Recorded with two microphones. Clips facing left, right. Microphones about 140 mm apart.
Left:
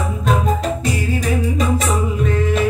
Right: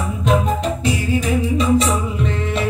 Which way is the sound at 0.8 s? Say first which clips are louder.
Right 1 dB; 45° left (ahead or behind).